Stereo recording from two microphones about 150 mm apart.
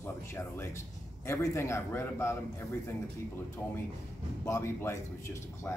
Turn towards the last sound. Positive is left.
turn(degrees=15)  # may be behind; listen again after turning